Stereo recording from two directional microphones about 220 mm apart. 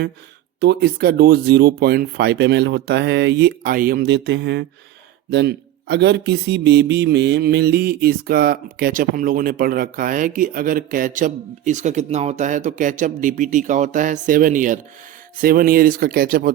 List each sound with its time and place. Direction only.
0.6 s speech: 45° right (ahead or behind)